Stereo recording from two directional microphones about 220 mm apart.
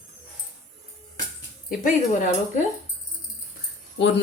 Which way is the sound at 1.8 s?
35° left (ahead or behind).